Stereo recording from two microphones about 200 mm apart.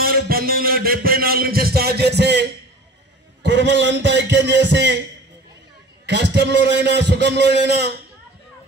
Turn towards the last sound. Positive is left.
turn(degrees=-55)  # may be behind; listen again after turning